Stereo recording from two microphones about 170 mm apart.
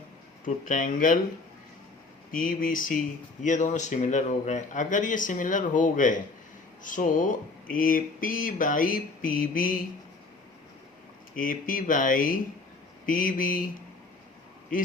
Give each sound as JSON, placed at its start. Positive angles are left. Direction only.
{"t": 0.4, "sound": "speech", "side_deg": 50}
{"t": 2.3, "sound": "speech", "side_deg": 55}
{"t": 11.3, "sound": "speech", "side_deg": 50}